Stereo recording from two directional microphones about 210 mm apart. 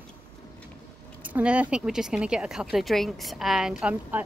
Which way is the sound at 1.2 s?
5° right (ahead or behind).